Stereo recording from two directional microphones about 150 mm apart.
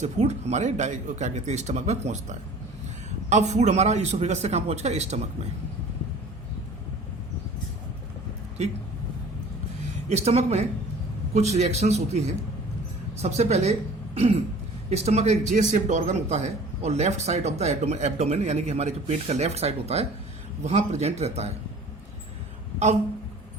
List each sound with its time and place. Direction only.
0.0 s speech: 50° right (ahead or behind)
3.2 s speech: 50° right (ahead or behind)
8.6 s speech: 50° right (ahead or behind)
10.1 s speech: 45° right (ahead or behind)
13.2 s speech: 45° right (ahead or behind)
14.2 s throat clearing: 40° right (ahead or behind)
14.8 s speech: 45° right (ahead or behind)